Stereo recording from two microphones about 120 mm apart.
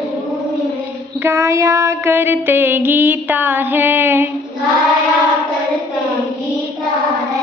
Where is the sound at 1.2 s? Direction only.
25° right (ahead or behind).